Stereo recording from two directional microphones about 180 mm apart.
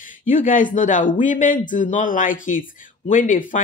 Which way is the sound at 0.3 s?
45° left (ahead or behind).